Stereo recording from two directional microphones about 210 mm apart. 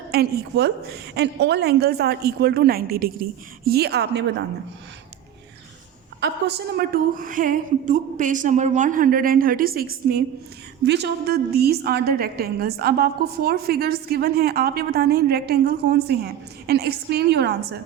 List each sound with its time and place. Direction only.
0.1 s a woman's voice: 50° right (ahead or behind)
6.7 s a woman's voice: 45° right (ahead or behind)